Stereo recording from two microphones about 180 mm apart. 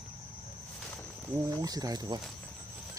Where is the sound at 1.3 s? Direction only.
20° right (ahead or behind).